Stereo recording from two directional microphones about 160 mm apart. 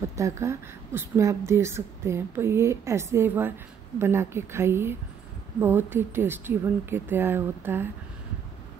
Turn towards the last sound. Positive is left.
turn(degrees=-15)  # may be behind; listen again after turning